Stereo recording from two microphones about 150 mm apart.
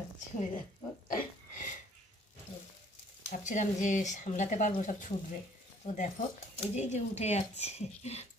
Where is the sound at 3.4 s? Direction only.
55° left (ahead or behind).